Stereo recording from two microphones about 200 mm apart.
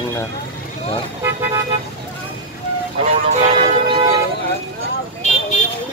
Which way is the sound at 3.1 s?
35° right (ahead or behind).